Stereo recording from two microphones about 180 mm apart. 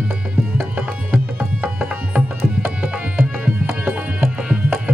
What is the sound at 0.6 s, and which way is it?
Music, 10° right (ahead or behind).